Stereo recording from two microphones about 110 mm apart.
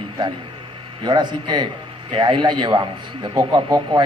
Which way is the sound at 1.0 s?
45° right (ahead or behind).